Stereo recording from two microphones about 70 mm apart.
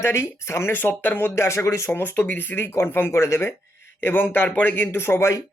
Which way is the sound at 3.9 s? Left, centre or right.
Left.